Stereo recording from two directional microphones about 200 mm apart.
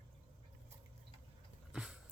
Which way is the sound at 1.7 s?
Centre (ahead or behind).